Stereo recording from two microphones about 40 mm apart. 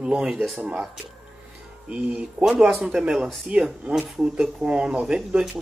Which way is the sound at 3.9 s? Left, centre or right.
Centre.